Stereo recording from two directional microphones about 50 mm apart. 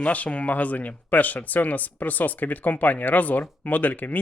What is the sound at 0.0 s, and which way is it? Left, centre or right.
A man's voice, left.